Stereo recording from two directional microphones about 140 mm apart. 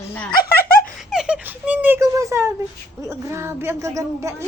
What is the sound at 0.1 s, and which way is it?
Speech, 10° left (ahead or behind).